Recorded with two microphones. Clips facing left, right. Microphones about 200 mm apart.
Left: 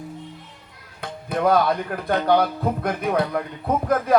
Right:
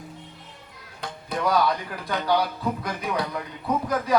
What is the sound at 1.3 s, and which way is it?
A man's voice, 55° left (ahead or behind).